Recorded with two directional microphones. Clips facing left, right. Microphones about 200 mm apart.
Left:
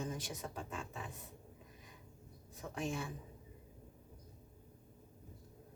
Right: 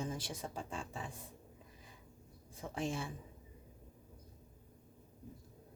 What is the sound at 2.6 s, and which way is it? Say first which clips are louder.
Speech: right 1 dB; 30° right (ahead or behind).